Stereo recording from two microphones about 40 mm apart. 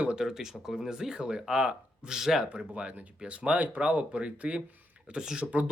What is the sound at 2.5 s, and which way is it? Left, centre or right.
Speech, right.